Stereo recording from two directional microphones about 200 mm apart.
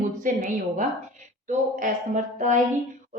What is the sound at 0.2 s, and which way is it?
A woman's voice, 40° right (ahead or behind).